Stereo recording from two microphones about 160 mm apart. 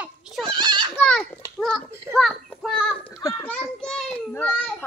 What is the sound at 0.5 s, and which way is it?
Goat, 30° right (ahead or behind).